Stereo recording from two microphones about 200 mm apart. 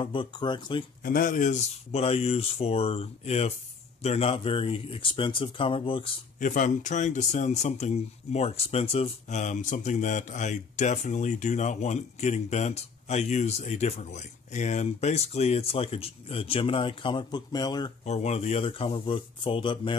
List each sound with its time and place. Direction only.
0.0 s speech: 25° left (ahead or behind)
1.0 s speech: 45° left (ahead or behind); by 6.1 s 25° left (ahead or behind)
6.4 s speech: 40° left (ahead or behind); by 17.9 s 20° left (ahead or behind)
18.0 s speech: 35° left (ahead or behind)